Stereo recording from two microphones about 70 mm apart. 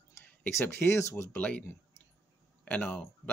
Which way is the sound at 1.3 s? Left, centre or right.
Centre.